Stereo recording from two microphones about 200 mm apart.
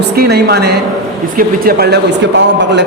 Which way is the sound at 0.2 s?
55° right (ahead or behind).